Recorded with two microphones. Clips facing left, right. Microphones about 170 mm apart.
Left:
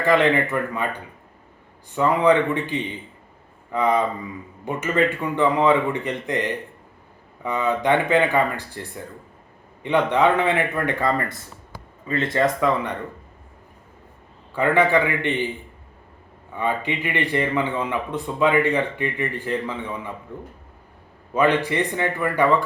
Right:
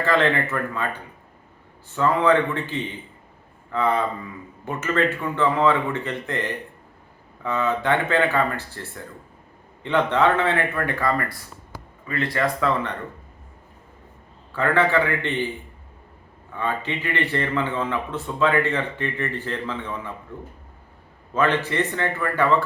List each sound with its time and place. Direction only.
0.0 s a man's voice: 15° left (ahead or behind)
2.0 s a man's voice: 15° left (ahead or behind)
14.5 s a man's voice: 15° left (ahead or behind)
16.6 s a man's voice: 15° left (ahead or behind)